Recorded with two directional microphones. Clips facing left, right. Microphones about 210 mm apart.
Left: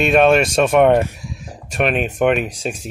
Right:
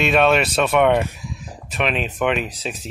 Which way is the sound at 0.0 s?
45° left (ahead or behind).